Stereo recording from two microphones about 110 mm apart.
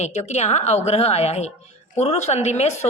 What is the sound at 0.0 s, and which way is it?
A woman's voice, 90° left.